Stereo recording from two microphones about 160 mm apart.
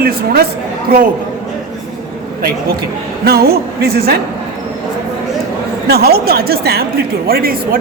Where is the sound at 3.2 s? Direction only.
75° right (ahead or behind).